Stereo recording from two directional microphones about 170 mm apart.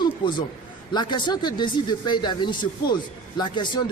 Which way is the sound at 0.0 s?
25° left (ahead or behind).